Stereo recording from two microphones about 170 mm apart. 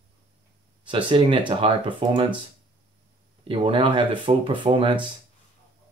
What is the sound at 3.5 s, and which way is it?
Speech, 30° right (ahead or behind).